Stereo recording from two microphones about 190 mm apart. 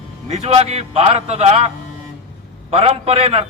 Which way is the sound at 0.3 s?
35° right (ahead or behind).